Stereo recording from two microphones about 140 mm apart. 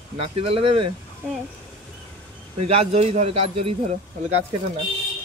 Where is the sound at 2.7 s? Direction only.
50° right (ahead or behind).